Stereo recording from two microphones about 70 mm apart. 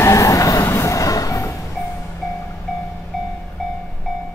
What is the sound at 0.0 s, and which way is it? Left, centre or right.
Train, left.